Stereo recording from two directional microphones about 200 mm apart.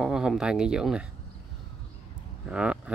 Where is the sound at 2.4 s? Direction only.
5° right (ahead or behind).